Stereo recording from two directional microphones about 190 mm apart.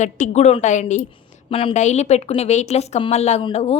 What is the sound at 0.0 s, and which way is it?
A woman's voice, 35° left (ahead or behind).